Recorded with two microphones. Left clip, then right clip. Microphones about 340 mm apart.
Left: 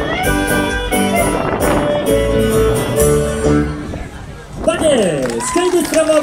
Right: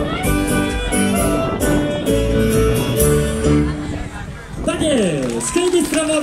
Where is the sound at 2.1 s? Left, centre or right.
Centre.